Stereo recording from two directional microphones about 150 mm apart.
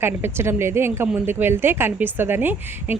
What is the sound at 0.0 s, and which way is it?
A woman's voice, 15° right (ahead or behind).